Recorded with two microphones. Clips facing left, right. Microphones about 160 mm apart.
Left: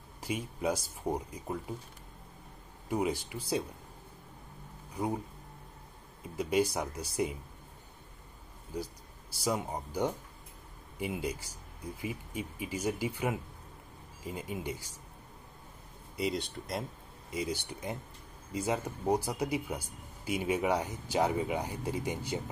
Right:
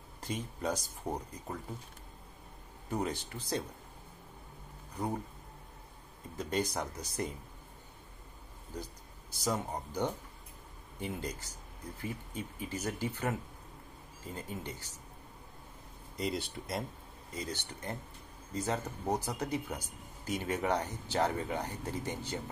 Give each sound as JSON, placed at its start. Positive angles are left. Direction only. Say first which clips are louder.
{"t": 0.2, "sound": "speech", "louder": "left 3 dB", "side_deg": 10}
{"t": 2.9, "sound": "speech", "louder": "left 4 dB", "side_deg": 10}
{"t": 4.9, "sound": "speech", "louder": "left 2 dB", "side_deg": 10}
{"t": 6.2, "sound": "speech", "louder": "left 5 dB", "side_deg": 10}
{"t": 8.7, "sound": "speech", "louder": "left 5 dB", "side_deg": 10}
{"t": 16.2, "sound": "speech", "louder": "left 2 dB", "side_deg": 0}
{"t": 17.3, "sound": "speech", "louder": "left 5 dB", "side_deg": 10}